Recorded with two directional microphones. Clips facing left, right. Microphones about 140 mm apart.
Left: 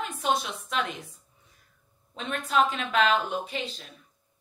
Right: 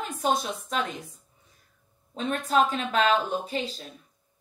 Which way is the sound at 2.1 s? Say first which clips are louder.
Right 3 dB; 35° right (ahead or behind).